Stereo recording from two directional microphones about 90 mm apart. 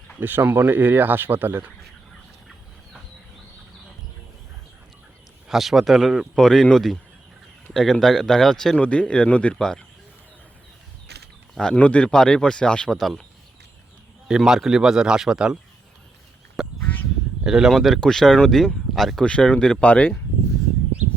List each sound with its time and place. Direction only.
0.2 s speech: 25° right (ahead or behind)
5.5 s speech: 5° right (ahead or behind)
11.5 s speech: 10° left (ahead or behind)
14.3 s a man's voice: 5° right (ahead or behind)
16.6 s duck: 5° right (ahead or behind)
17.4 s speech: 5° right (ahead or behind); by 20.1 s 15° left (ahead or behind)